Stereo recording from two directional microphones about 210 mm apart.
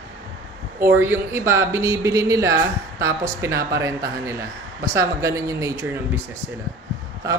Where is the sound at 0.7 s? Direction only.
10° right (ahead or behind).